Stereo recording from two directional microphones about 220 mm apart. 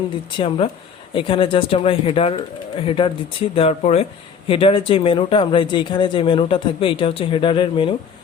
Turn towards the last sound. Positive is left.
turn(degrees=25)  # may be behind; listen again after turning